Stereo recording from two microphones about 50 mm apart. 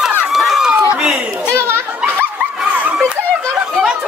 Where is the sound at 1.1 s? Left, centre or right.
Right.